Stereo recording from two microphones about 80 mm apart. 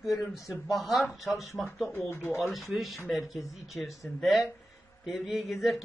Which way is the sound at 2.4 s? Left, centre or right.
Centre.